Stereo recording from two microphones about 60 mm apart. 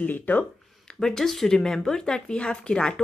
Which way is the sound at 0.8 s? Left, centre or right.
Centre.